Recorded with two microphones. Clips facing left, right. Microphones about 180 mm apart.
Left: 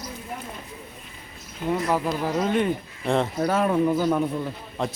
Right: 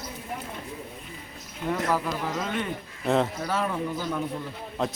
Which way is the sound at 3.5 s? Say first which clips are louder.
Left 7 dB; 50° left (ahead or behind).